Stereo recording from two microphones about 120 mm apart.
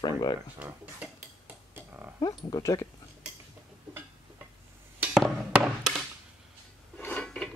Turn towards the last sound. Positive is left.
turn(degrees=5)  # may be behind; listen again after turning